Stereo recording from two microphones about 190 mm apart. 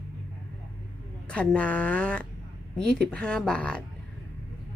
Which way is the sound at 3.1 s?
5° left (ahead or behind).